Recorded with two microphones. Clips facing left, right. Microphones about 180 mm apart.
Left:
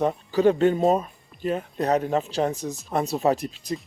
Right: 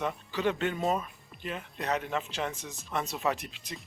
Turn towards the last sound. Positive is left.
turn(degrees=35)  # may be behind; listen again after turning